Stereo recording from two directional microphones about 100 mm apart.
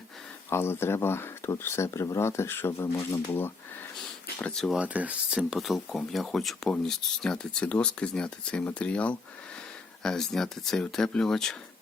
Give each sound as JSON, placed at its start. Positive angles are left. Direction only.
{"t": 0.5, "sound": "speech", "side_deg": 25}
{"t": 4.4, "sound": "speech", "side_deg": 10}
{"t": 4.7, "sound": "speech", "side_deg": -15}